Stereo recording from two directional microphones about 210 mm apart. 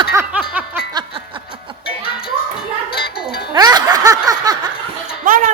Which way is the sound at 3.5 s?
20° right (ahead or behind).